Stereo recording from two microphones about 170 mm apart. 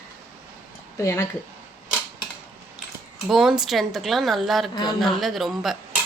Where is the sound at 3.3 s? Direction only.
Centre (ahead or behind).